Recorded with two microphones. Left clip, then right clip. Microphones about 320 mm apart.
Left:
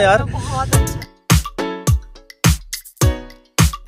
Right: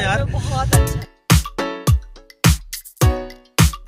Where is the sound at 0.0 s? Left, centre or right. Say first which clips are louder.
Left 7 dB; left.